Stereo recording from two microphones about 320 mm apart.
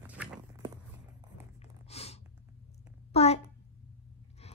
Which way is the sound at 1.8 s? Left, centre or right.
Centre.